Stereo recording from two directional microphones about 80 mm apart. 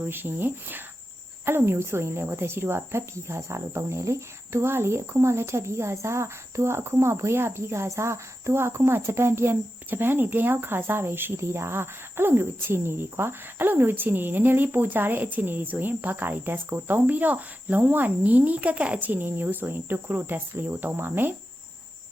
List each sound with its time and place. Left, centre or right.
0.0 s speech: right